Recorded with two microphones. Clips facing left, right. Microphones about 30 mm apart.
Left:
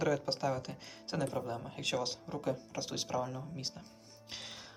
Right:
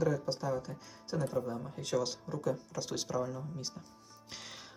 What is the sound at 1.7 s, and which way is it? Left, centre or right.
Speech, left.